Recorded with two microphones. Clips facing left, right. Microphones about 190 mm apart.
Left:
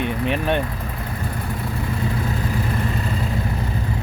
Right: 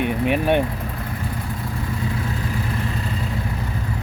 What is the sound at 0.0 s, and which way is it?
Speech, 10° right (ahead or behind).